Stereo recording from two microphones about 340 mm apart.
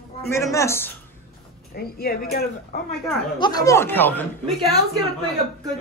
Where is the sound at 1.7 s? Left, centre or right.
Left.